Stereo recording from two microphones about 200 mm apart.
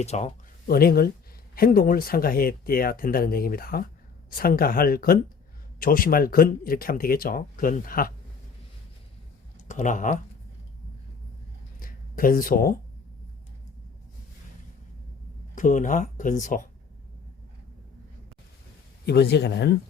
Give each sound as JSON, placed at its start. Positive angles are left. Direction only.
{"t": 0.0, "sound": "speech", "side_deg": 35}
{"t": 0.7, "sound": "speech", "side_deg": 50}
{"t": 9.6, "sound": "speech", "side_deg": 40}
{"t": 11.8, "sound": "a sound", "side_deg": 45}
{"t": 15.5, "sound": "speech", "side_deg": 40}
{"t": 19.0, "sound": "speech", "side_deg": 55}